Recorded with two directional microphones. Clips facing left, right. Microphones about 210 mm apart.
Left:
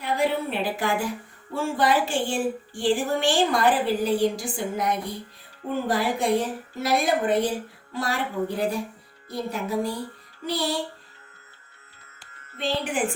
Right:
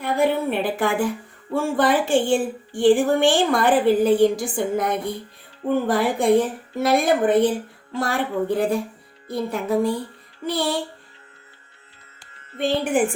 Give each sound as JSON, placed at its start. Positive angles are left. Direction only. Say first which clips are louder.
{"t": 0.0, "sound": "a woman's voice", "louder": "right 4 dB", "side_deg": -55}
{"t": 12.5, "sound": "a woman's voice", "louder": "right 6 dB", "side_deg": -50}